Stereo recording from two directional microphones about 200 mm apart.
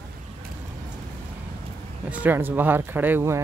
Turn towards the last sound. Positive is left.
turn(degrees=-10)  # may be behind; listen again after turning